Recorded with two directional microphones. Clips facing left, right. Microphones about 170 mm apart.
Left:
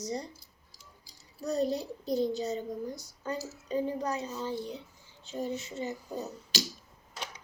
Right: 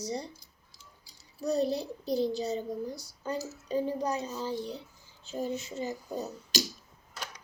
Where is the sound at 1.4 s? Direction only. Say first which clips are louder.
Right 2 dB; 10° right (ahead or behind).